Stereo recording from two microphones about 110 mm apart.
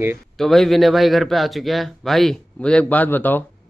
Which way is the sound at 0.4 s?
Centre (ahead or behind).